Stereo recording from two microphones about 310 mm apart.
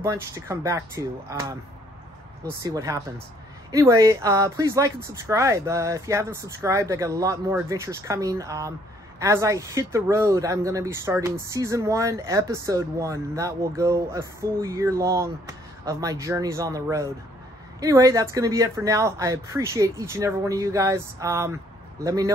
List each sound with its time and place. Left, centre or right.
0.0 s speech: centre
2.6 s speech: centre